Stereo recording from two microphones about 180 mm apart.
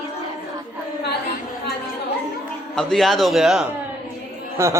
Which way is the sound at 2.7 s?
Centre (ahead or behind).